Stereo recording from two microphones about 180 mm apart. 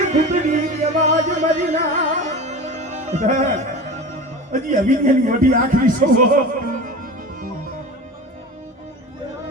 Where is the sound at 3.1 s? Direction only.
40° right (ahead or behind).